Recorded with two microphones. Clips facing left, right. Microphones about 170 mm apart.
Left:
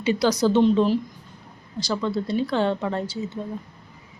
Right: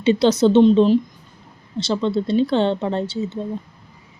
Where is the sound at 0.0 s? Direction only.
25° right (ahead or behind).